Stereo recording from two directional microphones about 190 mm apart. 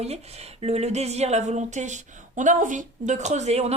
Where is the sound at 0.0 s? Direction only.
35° right (ahead or behind).